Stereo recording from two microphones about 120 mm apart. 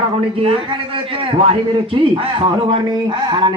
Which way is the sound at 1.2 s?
50° right (ahead or behind).